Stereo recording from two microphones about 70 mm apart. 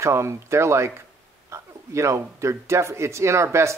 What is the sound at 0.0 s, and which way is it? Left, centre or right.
Speech, right.